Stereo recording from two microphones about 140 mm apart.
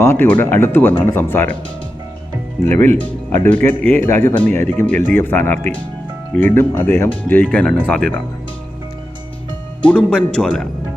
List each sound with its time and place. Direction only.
0.0 s speech: 15° left (ahead or behind)
2.6 s speech: 15° left (ahead or behind)
9.8 s speech: 10° left (ahead or behind)